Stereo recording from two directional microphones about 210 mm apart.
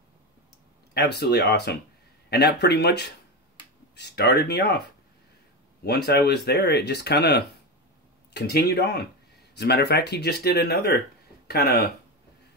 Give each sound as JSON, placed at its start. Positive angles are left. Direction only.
{"t": 0.9, "sound": "speech", "side_deg": 50}
{"t": 5.9, "sound": "speech", "side_deg": 50}